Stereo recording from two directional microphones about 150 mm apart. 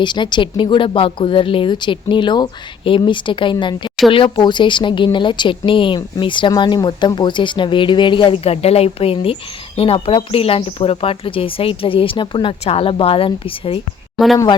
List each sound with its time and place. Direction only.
0.0 s speech: 30° left (ahead or behind)